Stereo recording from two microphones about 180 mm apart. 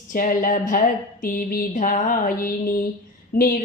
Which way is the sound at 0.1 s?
50° left (ahead or behind).